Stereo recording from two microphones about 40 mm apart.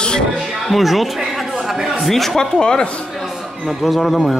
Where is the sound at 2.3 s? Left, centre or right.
Centre.